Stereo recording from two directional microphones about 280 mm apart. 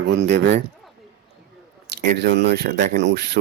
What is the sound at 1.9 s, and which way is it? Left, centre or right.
Speech, right.